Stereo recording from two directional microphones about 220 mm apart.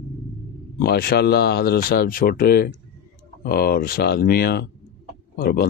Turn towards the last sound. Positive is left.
turn(degrees=45)  # may be behind; listen again after turning